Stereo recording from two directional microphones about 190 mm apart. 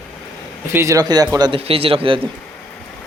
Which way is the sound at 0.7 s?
15° right (ahead or behind).